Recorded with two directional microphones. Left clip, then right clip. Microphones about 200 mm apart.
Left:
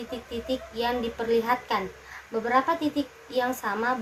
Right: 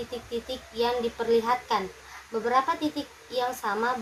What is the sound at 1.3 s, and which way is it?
Speech, 30° left (ahead or behind).